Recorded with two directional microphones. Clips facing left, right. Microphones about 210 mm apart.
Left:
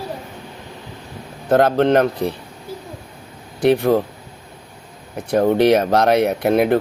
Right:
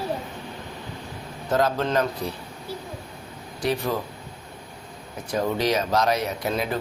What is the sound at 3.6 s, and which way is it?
Speech, 60° left (ahead or behind).